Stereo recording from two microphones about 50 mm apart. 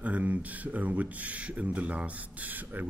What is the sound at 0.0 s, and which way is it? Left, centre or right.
Speech, right.